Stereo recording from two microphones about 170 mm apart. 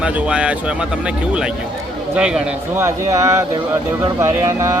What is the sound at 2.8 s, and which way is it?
Speech, 15° right (ahead or behind).